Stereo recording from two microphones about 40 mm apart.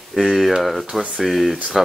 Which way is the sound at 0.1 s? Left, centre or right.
Centre.